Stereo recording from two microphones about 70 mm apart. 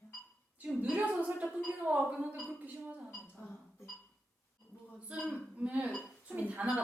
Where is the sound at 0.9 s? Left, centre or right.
Right.